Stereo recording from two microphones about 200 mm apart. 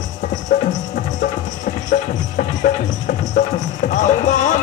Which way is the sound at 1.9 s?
40° left (ahead or behind).